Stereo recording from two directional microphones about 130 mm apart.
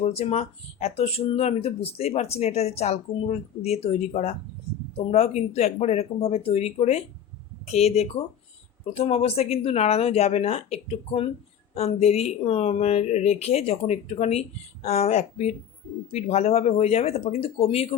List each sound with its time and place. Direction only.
0.0 s speech: 50° left (ahead or behind)